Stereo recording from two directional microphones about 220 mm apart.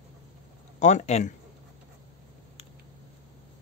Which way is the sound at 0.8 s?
30° left (ahead or behind).